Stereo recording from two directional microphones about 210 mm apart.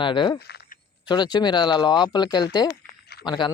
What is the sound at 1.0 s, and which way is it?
Speech, 20° left (ahead or behind).